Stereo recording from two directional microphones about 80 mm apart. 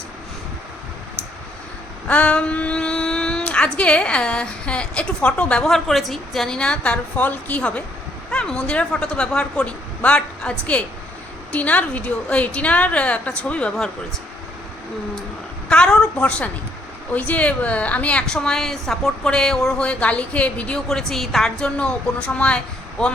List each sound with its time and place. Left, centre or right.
2.0 s speech: centre
15.7 s speech: centre
21.1 s speech: centre